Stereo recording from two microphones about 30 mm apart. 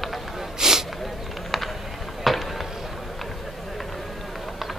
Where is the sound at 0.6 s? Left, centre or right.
Centre.